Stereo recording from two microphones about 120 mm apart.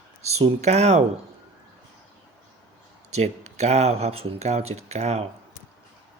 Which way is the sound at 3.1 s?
65° right (ahead or behind).